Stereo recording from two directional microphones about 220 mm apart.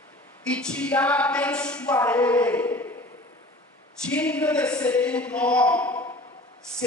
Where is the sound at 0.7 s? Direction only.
5° left (ahead or behind).